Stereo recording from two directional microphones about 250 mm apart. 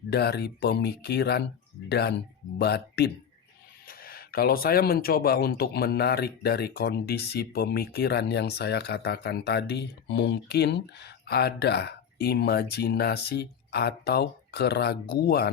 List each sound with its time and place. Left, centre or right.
0.1 s speech: left